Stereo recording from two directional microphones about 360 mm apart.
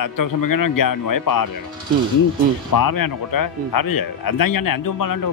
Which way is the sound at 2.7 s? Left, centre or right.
Left.